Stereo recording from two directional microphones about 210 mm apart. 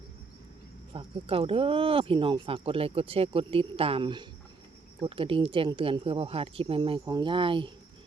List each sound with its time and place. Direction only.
0.9 s speech: 25° right (ahead or behind)